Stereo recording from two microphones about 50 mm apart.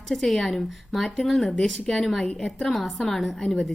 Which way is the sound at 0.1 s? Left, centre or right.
Centre.